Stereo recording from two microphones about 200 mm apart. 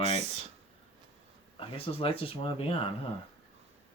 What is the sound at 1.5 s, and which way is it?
Speech, 25° left (ahead or behind).